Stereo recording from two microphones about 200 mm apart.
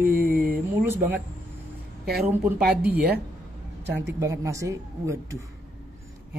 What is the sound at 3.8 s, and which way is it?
Speech, 60° right (ahead or behind).